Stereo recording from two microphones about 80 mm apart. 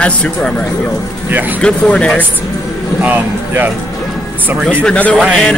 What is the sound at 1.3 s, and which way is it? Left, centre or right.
Speech, right.